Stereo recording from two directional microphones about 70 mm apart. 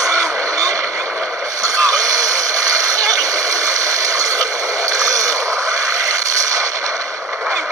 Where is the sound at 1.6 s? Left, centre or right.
Right.